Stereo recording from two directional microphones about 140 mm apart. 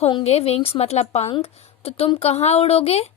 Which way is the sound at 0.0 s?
45° left (ahead or behind).